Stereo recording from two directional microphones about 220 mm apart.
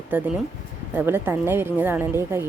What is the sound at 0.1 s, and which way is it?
Speech, 10° right (ahead or behind).